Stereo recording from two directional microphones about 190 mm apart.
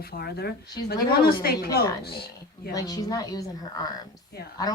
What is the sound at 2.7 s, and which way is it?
A woman's voice, 20° left (ahead or behind).